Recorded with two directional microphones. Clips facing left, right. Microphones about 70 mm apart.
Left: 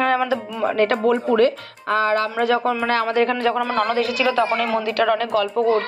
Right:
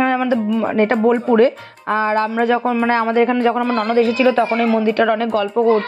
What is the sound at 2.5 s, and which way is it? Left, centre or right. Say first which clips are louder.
Speech: right 2 dB; centre.